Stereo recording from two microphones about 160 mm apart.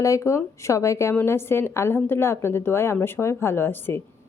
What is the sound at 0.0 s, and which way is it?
A woman's voice, 20° left (ahead or behind).